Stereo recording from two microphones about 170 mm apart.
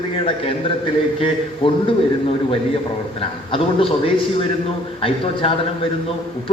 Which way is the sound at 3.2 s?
30° left (ahead or behind).